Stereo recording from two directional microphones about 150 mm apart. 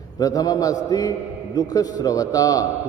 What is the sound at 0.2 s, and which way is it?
A man's voice, 25° left (ahead or behind).